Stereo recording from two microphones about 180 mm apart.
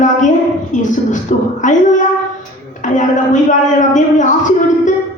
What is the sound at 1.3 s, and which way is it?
Speech, 45° left (ahead or behind).